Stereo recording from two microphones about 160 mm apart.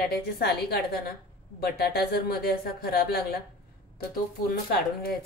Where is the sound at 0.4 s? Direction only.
75° left (ahead or behind).